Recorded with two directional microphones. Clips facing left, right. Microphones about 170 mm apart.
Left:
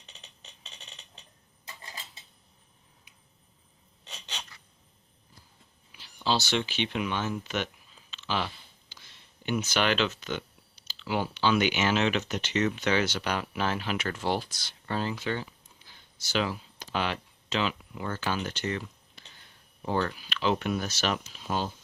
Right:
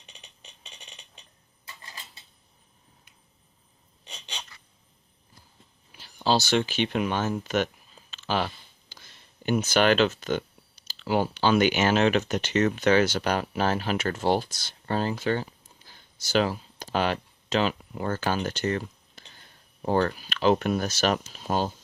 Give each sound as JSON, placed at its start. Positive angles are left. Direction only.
{"t": 5.9, "sound": "speech", "side_deg": -40}